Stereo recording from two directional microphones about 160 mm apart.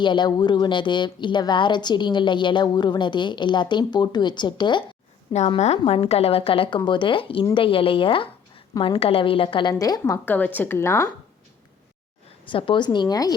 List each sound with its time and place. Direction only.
0.0 s a woman's voice: 30° left (ahead or behind)
5.3 s a woman's voice: 45° left (ahead or behind); by 11.1 s 15° left (ahead or behind)
12.5 s a woman's voice: 30° left (ahead or behind)